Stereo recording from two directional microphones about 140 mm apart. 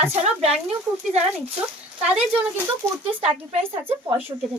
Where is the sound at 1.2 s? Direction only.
50° right (ahead or behind).